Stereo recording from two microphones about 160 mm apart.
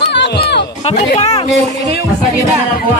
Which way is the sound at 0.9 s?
45° left (ahead or behind).